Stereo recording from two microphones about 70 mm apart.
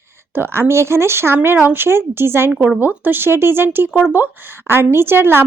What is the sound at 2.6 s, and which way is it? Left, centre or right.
A woman's voice, right.